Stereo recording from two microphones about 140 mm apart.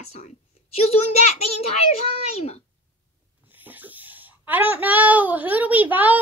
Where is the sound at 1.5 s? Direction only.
50° left (ahead or behind).